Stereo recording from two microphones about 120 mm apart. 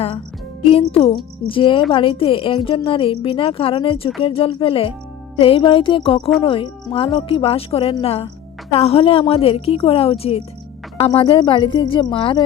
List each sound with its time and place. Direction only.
0.7 s a woman's voice: 55° left (ahead or behind)